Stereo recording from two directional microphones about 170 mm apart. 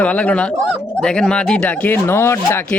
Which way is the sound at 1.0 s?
5° left (ahead or behind).